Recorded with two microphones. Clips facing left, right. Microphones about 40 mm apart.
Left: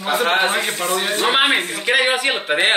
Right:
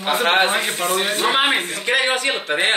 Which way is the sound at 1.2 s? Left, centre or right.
Centre.